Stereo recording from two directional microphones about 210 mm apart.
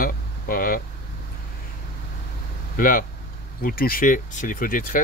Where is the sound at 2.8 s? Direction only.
40° left (ahead or behind).